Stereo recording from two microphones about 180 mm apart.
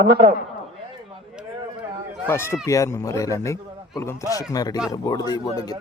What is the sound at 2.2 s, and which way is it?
A man's voice, 15° left (ahead or behind).